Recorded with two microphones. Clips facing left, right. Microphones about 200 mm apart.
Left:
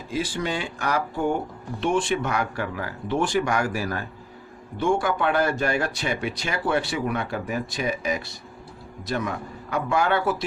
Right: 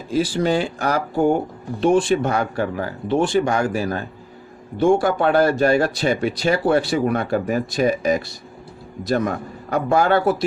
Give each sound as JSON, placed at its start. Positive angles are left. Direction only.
{"t": 0.1, "sound": "speech", "side_deg": -35}